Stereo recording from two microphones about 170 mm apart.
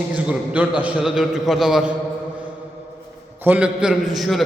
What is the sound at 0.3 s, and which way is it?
A man's voice, 10° right (ahead or behind).